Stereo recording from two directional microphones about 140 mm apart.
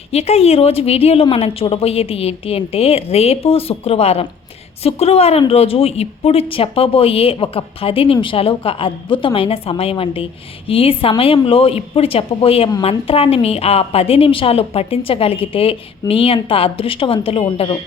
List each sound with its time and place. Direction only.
0.1 s a woman's voice: 45° left (ahead or behind)